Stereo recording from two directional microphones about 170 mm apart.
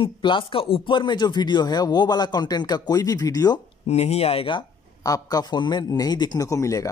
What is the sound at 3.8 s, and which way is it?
Speech, 40° left (ahead or behind).